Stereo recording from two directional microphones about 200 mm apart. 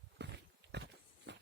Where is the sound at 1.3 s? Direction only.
65° right (ahead or behind).